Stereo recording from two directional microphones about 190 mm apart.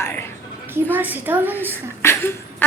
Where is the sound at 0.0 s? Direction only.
10° left (ahead or behind).